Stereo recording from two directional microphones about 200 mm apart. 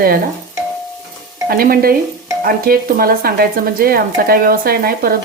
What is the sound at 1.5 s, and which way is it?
Speech, 50° right (ahead or behind).